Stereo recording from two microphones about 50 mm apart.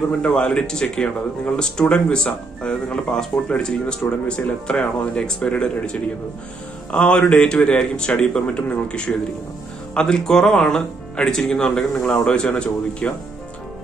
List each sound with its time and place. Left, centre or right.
0.2 s speech: centre